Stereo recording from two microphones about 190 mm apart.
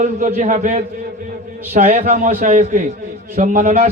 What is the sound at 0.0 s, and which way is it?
A man's voice, 35° right (ahead or behind).